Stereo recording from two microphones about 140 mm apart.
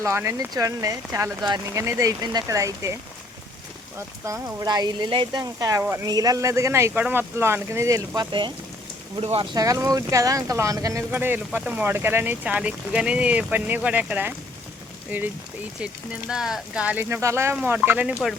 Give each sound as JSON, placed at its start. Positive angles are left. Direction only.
{"t": 0.0, "sound": "speech", "side_deg": -20}
{"t": 4.3, "sound": "speech", "side_deg": -25}
{"t": 6.1, "sound": "speech", "side_deg": -25}
{"t": 16.3, "sound": "speech", "side_deg": -5}